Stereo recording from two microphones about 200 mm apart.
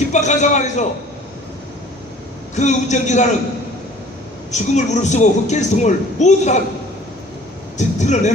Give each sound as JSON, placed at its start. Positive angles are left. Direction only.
{"t": 0.1, "sound": "speech", "side_deg": 35}
{"t": 2.6, "sound": "speech", "side_deg": 35}
{"t": 4.5, "sound": "speech", "side_deg": 35}
{"t": 7.8, "sound": "speech", "side_deg": 35}